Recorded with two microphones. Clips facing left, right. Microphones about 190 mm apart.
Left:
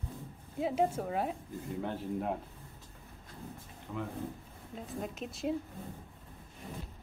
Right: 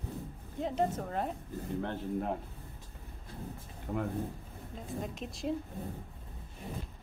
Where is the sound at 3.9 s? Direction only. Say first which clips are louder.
Right 4 dB; 45° right (ahead or behind).